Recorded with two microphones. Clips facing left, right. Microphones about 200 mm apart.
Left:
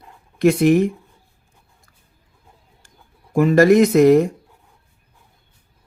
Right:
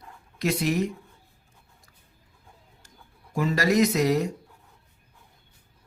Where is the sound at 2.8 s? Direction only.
55° left (ahead or behind).